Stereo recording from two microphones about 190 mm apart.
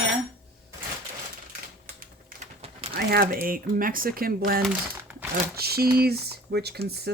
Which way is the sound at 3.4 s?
45° right (ahead or behind).